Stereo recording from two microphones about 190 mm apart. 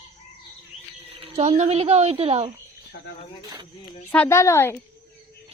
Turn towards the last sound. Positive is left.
turn(degrees=15)  # may be behind; listen again after turning